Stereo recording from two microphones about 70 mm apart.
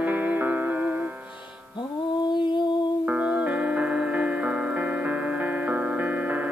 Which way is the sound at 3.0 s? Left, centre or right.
Centre.